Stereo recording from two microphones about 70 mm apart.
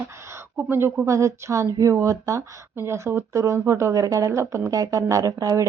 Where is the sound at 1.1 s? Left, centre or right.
Right.